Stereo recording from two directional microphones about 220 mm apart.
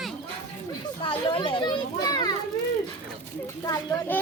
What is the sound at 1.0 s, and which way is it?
Children playing, 20° left (ahead or behind).